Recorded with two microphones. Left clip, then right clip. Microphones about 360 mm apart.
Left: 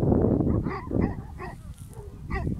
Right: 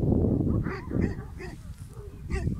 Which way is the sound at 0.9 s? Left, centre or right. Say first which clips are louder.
Left 3 dB; left.